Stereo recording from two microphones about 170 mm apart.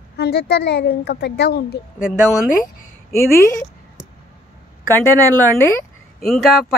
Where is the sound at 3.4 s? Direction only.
15° left (ahead or behind).